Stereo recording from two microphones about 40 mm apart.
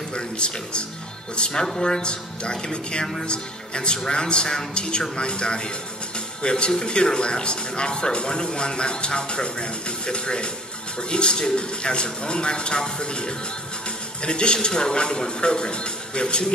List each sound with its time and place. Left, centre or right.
0.1 s speech: left